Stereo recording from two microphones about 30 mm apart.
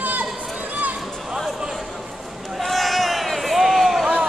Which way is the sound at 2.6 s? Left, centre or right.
Centre.